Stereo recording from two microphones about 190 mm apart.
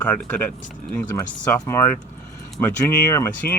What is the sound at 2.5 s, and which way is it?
Speech, 10° left (ahead or behind).